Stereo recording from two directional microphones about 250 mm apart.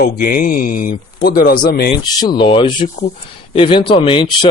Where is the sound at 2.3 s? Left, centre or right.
Centre.